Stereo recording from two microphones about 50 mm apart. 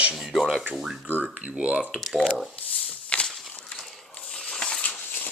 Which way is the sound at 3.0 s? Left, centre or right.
Left.